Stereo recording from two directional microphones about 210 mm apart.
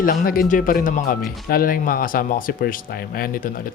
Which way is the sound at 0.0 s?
45° left (ahead or behind).